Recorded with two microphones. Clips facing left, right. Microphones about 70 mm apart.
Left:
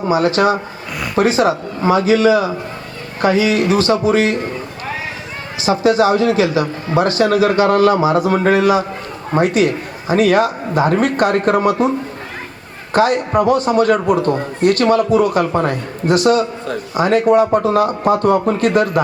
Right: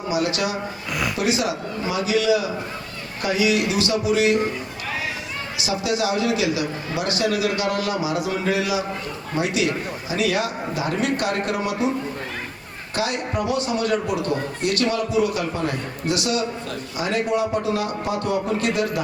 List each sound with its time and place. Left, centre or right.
0.1 s a man's voice: left
5.5 s a man's voice: left
12.9 s a man's voice: left